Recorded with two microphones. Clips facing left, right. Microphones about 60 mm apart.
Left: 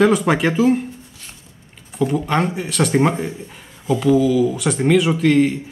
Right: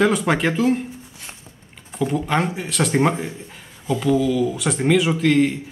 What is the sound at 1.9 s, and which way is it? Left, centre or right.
Speech, centre.